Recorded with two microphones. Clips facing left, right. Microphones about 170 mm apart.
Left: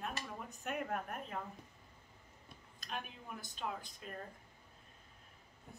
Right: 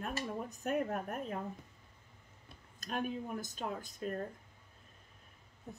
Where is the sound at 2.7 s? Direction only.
45° right (ahead or behind).